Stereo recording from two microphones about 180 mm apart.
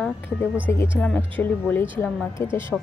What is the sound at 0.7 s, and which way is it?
A woman's voice, 10° left (ahead or behind).